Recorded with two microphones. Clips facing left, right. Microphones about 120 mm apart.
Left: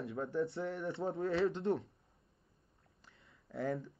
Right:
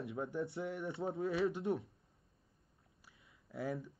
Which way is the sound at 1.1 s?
Centre (ahead or behind).